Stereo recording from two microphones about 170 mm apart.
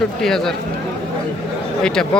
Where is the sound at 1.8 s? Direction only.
5° left (ahead or behind).